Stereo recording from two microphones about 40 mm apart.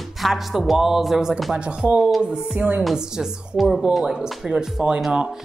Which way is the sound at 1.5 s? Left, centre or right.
Right.